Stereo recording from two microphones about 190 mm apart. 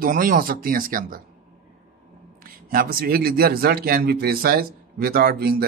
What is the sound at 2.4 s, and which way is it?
Speech, 50° right (ahead or behind).